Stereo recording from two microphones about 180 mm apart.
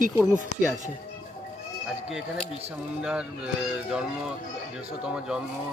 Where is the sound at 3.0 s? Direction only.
5° right (ahead or behind).